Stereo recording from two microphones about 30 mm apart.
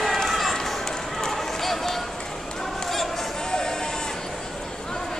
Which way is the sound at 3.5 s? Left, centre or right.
Left.